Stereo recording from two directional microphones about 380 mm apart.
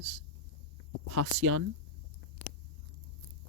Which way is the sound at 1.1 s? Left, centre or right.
Right.